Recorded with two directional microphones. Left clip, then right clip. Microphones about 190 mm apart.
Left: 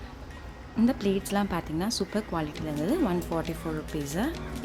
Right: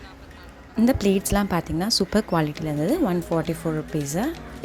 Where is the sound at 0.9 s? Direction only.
35° right (ahead or behind).